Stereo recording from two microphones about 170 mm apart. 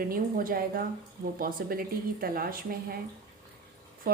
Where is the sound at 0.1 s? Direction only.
55° right (ahead or behind).